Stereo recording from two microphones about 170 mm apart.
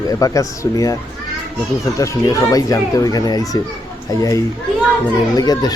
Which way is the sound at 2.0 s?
20° left (ahead or behind).